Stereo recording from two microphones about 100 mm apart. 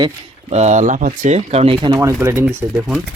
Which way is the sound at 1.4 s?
90° right.